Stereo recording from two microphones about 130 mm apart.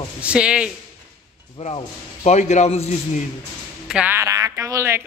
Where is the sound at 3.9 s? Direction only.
5° right (ahead or behind).